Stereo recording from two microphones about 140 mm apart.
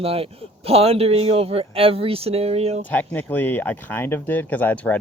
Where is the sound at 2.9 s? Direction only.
10° left (ahead or behind).